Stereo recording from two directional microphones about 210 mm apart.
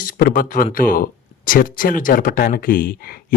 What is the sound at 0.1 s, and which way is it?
Speech, 45° left (ahead or behind).